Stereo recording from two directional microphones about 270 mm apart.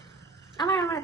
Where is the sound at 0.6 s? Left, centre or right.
Centre.